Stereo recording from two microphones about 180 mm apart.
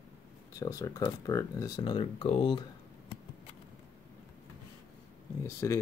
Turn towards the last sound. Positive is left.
turn(degrees=15)  # may be behind; listen again after turning